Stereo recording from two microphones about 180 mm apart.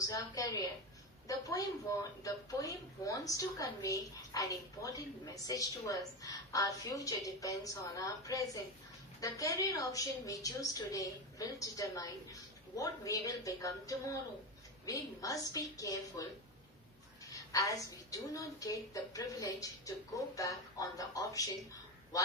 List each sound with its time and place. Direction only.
0.1 s a woman's voice: 20° left (ahead or behind)
17.3 s a woman's voice: 20° left (ahead or behind)